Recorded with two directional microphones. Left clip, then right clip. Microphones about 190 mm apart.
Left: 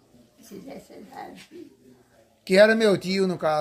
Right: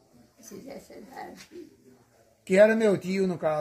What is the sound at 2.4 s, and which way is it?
Speech, 20° left (ahead or behind).